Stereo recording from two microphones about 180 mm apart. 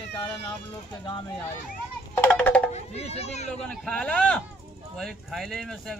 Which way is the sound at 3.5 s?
5° left (ahead or behind).